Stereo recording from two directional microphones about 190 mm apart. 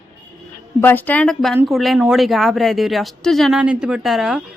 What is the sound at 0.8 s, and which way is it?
A woman's voice, 10° left (ahead or behind).